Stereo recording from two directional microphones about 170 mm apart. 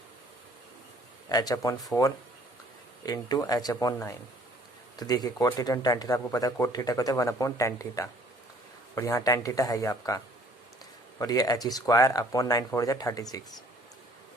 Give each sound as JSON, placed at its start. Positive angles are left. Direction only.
{"t": 1.3, "sound": "speech", "side_deg": 20}
{"t": 11.2, "sound": "speech", "side_deg": 20}